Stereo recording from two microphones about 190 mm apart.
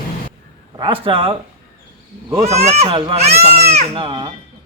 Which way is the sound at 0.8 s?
30° right (ahead or behind).